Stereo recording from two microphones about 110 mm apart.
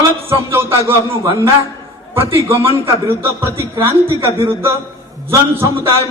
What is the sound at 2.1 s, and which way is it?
A man's voice, 20° right (ahead or behind).